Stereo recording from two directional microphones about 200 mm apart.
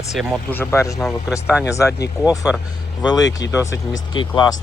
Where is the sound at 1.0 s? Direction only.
5° right (ahead or behind).